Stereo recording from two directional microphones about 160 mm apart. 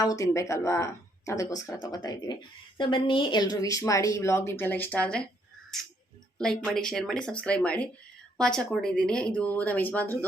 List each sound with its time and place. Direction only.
0.0 s speech: 20° left (ahead or behind)